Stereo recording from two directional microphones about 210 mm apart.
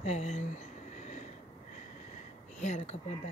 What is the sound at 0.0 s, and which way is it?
Speech, 30° left (ahead or behind).